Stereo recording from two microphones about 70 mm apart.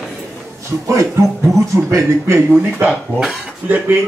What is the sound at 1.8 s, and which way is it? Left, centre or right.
Speech, right.